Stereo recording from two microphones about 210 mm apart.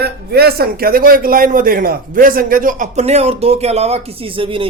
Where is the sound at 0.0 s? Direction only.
50° right (ahead or behind).